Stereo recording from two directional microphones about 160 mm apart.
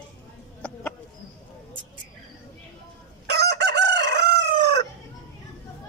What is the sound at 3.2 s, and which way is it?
Chicken, 90° right.